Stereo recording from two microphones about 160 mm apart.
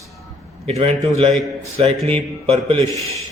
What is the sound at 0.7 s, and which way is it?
A man's voice, 40° right (ahead or behind).